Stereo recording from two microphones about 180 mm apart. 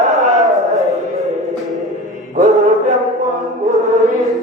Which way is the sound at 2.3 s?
40° right (ahead or behind).